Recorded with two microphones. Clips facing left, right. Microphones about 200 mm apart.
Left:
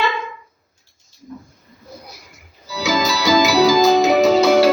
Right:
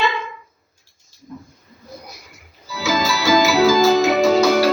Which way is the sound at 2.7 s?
20° left (ahead or behind).